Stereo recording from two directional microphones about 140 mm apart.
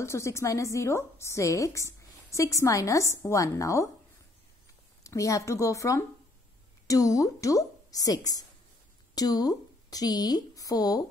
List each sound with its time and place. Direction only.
0.0 s a woman's voice: 20° left (ahead or behind)
5.0 s a woman's voice: 25° left (ahead or behind)